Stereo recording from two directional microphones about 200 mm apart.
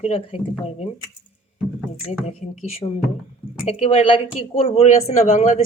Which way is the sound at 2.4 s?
30° left (ahead or behind).